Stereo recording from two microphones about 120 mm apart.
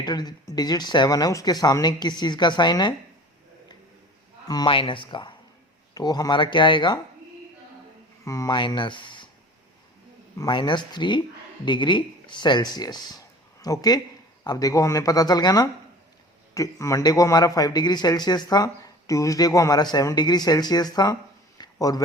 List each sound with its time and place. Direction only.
0.0 s a man's voice: 35° left (ahead or behind)
4.4 s speech: 35° left (ahead or behind)
4.7 s a man's voice: 45° left (ahead or behind)
8.2 s speech: 25° left (ahead or behind)
8.5 s a man's voice: 40° left (ahead or behind)
10.5 s a man's voice: 40° left (ahead or behind)
21.6 s a sound: 30° left (ahead or behind)